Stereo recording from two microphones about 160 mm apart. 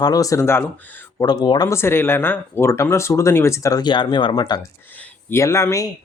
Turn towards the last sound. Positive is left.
turn(degrees=20)  # may be behind; listen again after turning